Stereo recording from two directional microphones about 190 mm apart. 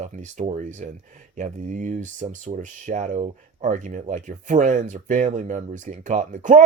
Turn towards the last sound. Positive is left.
turn(degrees=-40)  # may be behind; listen again after turning